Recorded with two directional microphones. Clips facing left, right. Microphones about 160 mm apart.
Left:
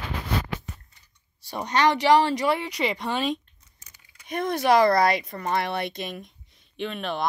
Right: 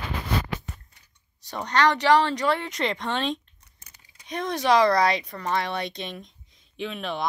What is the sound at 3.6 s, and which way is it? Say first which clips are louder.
Crumpling: right 1 dB; 55° right (ahead or behind).